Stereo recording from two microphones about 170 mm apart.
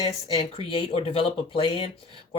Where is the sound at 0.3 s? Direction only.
30° left (ahead or behind).